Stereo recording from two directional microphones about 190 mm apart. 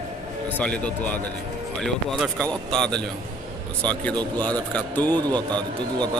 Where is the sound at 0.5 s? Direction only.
5° left (ahead or behind).